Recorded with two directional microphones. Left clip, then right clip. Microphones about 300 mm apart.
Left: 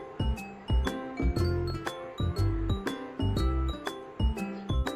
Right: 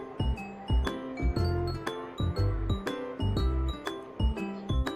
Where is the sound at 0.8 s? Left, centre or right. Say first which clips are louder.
Left 2 dB; centre.